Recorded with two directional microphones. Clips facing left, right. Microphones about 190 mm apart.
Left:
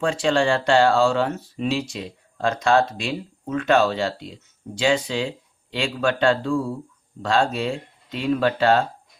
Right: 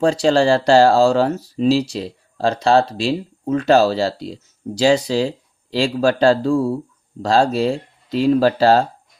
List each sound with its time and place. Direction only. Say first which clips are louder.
0.0 s speech: right 5 dB; 35° right (ahead or behind)